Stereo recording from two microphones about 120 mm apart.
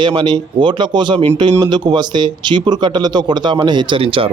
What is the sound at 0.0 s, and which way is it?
Speech, 40° right (ahead or behind).